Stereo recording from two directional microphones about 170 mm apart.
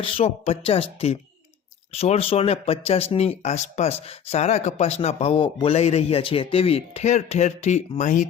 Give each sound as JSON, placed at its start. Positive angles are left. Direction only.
{"t": 0.0, "sound": "speech", "side_deg": 35}